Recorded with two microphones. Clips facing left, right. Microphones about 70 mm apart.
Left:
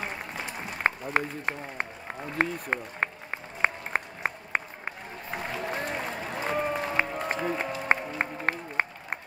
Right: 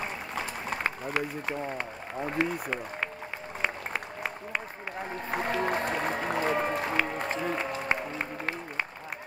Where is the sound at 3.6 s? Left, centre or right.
Left.